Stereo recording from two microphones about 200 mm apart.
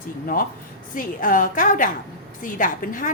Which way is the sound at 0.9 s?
45° left (ahead or behind).